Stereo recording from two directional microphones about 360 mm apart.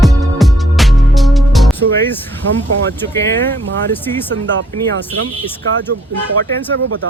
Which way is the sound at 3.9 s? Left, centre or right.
Centre.